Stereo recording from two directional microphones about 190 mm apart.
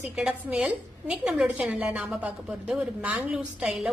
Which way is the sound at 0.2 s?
5° right (ahead or behind).